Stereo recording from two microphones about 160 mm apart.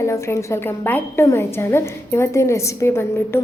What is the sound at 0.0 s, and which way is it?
A woman's voice, 20° left (ahead or behind).